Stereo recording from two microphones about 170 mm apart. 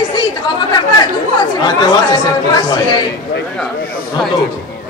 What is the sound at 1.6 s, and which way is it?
Speech, 25° left (ahead or behind).